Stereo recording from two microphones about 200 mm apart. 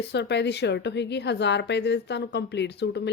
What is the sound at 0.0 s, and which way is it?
A woman's voice, 55° left (ahead or behind).